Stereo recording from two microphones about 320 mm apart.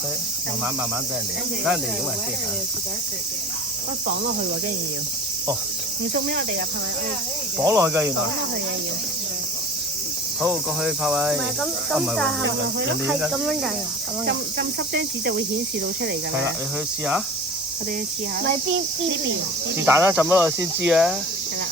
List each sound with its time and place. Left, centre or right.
6.2 s cricket: right
7.6 s speech: centre
10.4 s cricket: centre
14.3 s cricket: right
19.7 s speech: centre